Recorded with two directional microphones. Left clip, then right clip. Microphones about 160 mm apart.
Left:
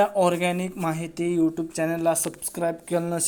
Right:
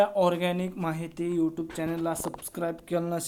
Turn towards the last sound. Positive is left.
turn(degrees=20)  # may be behind; listen again after turning